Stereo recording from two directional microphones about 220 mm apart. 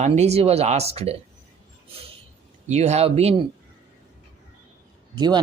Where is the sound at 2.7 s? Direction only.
30° right (ahead or behind).